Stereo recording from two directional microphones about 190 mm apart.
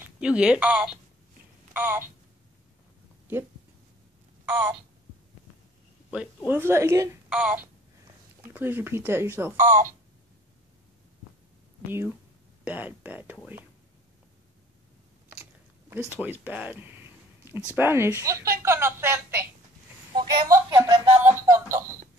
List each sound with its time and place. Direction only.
0.0 s speech: 5° right (ahead or behind)
6.0 s a woman's voice: 5° right (ahead or behind)
7.2 s a woman's voice: 5° right (ahead or behind)
9.7 s speech: 45° right (ahead or behind)
12.6 s a woman's voice: 10° right (ahead or behind)
15.9 s a woman's voice: 10° right (ahead or behind)
21.2 s music: 10° right (ahead or behind)